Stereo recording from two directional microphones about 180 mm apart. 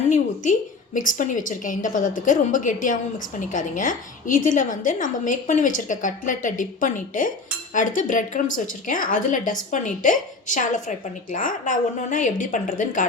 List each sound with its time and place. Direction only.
0.9 s a woman's voice: 45° left (ahead or behind)